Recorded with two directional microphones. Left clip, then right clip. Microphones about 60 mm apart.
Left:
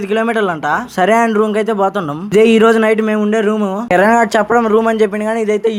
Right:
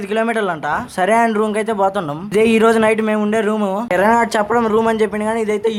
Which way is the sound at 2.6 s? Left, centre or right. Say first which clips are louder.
Left 3 dB; left.